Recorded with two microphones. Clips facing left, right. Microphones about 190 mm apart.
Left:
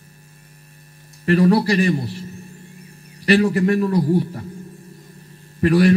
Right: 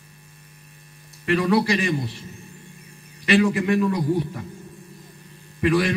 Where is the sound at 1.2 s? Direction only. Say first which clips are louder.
Left 4 dB; 40° left (ahead or behind).